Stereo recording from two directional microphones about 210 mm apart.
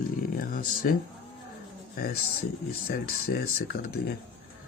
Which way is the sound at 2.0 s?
45° left (ahead or behind).